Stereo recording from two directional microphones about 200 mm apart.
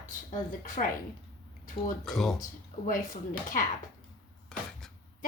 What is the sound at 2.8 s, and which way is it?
Speech, 40° left (ahead or behind).